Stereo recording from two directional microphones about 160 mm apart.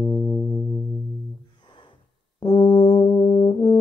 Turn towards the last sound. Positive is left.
turn(degrees=35)  # may be behind; listen again after turning